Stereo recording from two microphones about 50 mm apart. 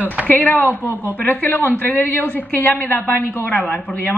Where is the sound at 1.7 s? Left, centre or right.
Left.